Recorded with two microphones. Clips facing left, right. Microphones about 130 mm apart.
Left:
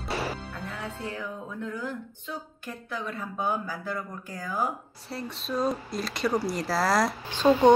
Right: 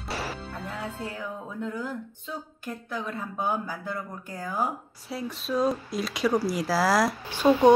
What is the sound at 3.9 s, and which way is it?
Speech, 5° right (ahead or behind).